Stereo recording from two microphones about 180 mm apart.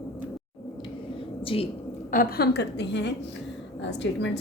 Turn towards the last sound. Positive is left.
turn(degrees=75)  # may be behind; listen again after turning